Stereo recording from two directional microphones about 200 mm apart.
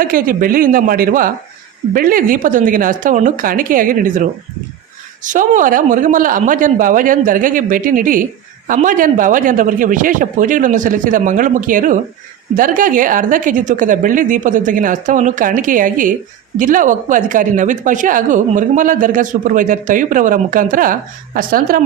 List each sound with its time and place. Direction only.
0.0 s a man's voice: 45° right (ahead or behind)